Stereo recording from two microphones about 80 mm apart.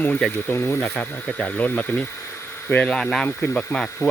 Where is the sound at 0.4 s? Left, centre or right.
Left.